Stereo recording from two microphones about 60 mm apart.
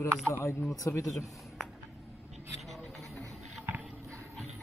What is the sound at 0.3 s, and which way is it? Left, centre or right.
Speech, left.